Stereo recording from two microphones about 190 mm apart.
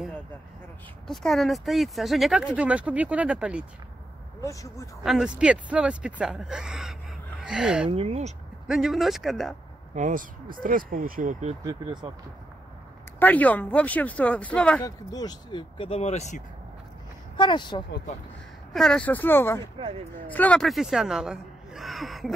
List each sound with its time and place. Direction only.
1.0 s speech: centre (ahead or behind)
4.4 s speech: 15° left (ahead or behind)
5.0 s speech: 5° right (ahead or behind)
7.9 s speech: 35° right (ahead or behind)
8.6 s speech: centre (ahead or behind)
9.9 s speech: 45° right (ahead or behind)
11.6 s speech: 25° right (ahead or behind)
13.2 s speech: 10° left (ahead or behind)
14.8 s speech: 20° left (ahead or behind); by 16.4 s 35° left (ahead or behind)
17.4 s speech: 25° left (ahead or behind)
18.7 s speech: 5° left (ahead or behind)